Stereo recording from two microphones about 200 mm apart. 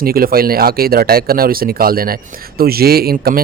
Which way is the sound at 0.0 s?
45° right (ahead or behind).